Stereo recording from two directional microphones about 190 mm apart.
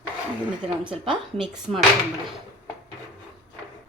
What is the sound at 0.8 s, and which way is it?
Speech, 25° right (ahead or behind).